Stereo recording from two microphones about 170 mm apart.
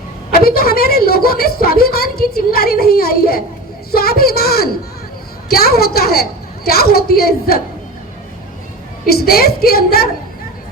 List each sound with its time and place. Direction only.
0.3 s a woman's voice: 65° left (ahead or behind)
9.0 s a woman's voice: 65° left (ahead or behind)